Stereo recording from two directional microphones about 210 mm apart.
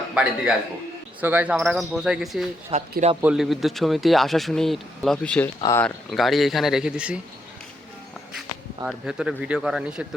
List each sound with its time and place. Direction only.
0.1 s a man's voice: 5° right (ahead or behind)
2.7 s speech: 30° right (ahead or behind)
3.2 s speech: 5° right (ahead or behind)
5.5 s speech: 15° left (ahead or behind)
5.8 s speech: centre (ahead or behind)
8.8 s speech: 5° right (ahead or behind)